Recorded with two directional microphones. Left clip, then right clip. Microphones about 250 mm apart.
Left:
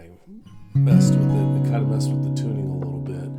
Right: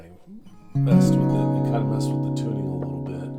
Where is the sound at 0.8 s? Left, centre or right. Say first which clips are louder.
Even; left.